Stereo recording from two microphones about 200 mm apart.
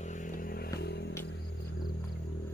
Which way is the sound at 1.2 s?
60° left (ahead or behind).